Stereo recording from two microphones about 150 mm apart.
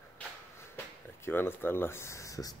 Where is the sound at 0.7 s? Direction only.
15° left (ahead or behind).